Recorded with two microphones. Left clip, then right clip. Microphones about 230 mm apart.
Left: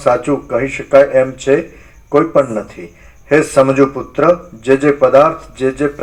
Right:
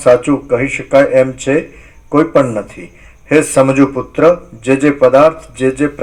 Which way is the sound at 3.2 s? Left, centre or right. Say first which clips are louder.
Even; right.